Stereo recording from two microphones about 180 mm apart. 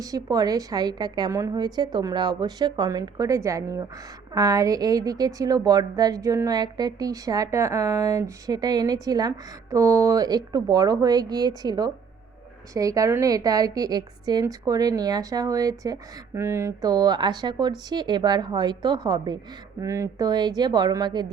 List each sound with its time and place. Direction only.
0.0 s a woman's voice: 20° right (ahead or behind)